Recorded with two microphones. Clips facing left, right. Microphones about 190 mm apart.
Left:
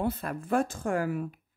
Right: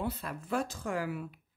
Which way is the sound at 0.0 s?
50° left (ahead or behind).